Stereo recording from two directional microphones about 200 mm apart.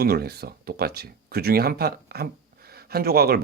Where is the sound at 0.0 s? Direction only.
50° right (ahead or behind).